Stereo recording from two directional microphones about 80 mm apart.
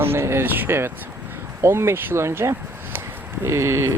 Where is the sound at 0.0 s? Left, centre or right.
Right.